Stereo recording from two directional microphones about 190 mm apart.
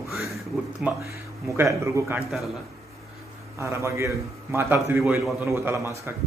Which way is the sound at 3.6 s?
15° right (ahead or behind).